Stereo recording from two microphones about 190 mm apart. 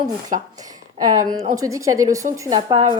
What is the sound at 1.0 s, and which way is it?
A woman's voice, 20° right (ahead or behind).